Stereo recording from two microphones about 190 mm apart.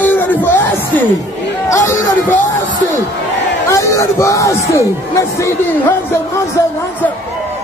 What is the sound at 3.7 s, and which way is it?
Speech, 15° left (ahead or behind).